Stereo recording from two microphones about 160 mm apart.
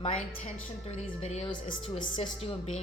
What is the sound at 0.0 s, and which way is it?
A woman's voice, 40° left (ahead or behind).